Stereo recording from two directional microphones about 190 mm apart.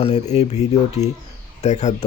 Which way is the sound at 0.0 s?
35° left (ahead or behind).